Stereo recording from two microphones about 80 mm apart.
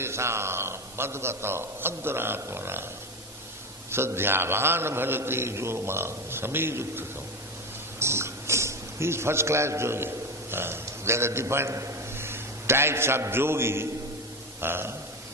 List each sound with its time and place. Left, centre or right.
0.0 s a man's voice: right
3.9 s a man's voice: right
7.9 s a sound: right
10.5 s a man's voice: right